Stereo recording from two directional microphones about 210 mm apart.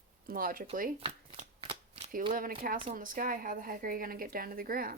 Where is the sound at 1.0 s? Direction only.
25° right (ahead or behind).